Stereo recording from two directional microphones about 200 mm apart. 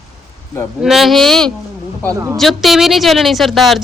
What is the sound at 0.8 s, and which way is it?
Speech, centre (ahead or behind).